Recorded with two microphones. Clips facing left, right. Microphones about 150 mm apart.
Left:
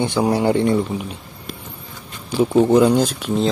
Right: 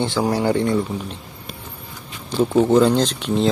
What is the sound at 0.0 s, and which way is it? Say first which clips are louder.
Speech: left 2 dB; 20° left (ahead or behind).